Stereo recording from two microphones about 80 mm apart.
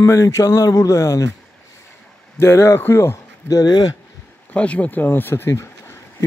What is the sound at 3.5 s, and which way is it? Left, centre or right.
Speech, left.